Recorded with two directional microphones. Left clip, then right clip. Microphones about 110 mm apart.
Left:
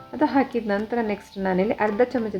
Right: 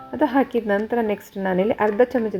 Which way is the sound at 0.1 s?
25° right (ahead or behind).